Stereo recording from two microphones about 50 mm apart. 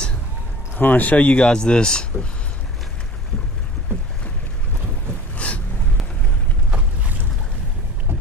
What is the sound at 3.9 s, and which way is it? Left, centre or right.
Boat, right.